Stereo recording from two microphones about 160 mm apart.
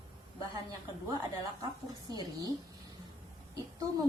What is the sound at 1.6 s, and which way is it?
Speech, 25° right (ahead or behind).